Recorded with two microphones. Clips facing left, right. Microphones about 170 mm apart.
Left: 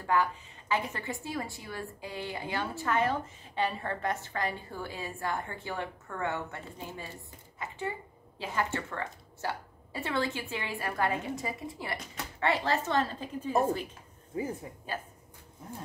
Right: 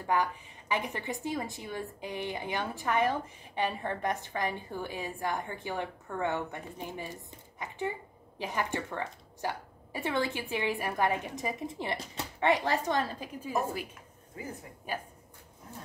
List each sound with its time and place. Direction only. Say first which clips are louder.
0.0 s a woman's voice: left 1 dB; 15° right (ahead or behind)